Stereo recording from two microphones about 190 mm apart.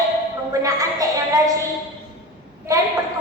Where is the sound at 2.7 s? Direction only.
20° right (ahead or behind).